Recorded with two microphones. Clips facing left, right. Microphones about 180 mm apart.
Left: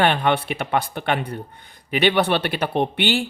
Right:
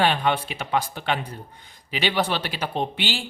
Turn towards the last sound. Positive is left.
turn(degrees=60)  # may be behind; listen again after turning